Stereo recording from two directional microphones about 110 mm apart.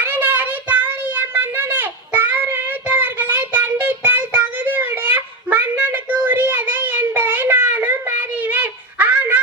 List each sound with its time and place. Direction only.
0.0 s child singing: 15° right (ahead or behind)